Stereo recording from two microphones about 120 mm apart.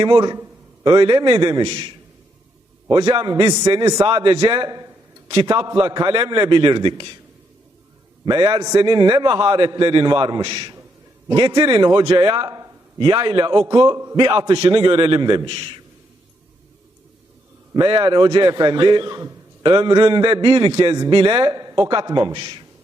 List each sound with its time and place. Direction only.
0.0 s a man's voice: 40° right (ahead or behind)
2.9 s a man's voice: 40° right (ahead or behind)
8.2 s a man's voice: 45° right (ahead or behind)
8.5 s a man's voice: 30° right (ahead or behind)
8.8 s a man's voice: 40° right (ahead or behind)
17.7 s a man's voice: 45° right (ahead or behind)